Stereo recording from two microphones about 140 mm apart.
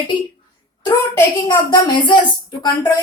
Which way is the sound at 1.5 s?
35° left (ahead or behind).